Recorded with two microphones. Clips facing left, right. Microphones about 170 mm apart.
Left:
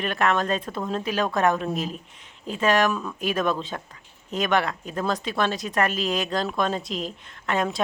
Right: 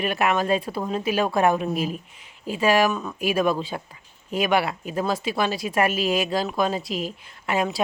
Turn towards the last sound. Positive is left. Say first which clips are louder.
# right 1 dB
turn(degrees=-5)  # may be behind; listen again after turning